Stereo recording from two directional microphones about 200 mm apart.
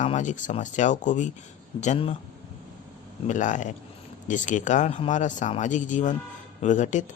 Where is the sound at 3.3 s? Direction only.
40° left (ahead or behind).